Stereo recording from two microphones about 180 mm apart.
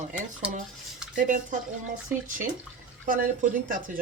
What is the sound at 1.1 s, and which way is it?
Speech, 45° right (ahead or behind).